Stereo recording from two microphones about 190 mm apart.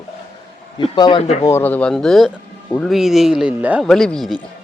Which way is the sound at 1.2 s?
35° left (ahead or behind).